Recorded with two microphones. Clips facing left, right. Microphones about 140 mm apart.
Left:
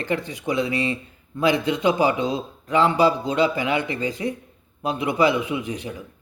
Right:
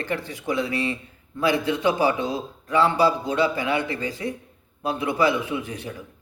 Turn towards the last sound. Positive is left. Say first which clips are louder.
# left 2 dB
turn(degrees=20)  # may be behind; listen again after turning